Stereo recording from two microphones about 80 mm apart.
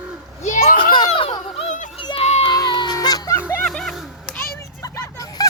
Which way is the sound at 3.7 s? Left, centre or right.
Centre.